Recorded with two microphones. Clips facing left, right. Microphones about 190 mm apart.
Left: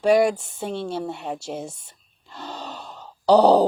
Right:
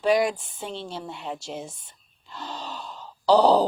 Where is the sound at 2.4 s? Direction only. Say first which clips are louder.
Left 1 dB; 60° left (ahead or behind).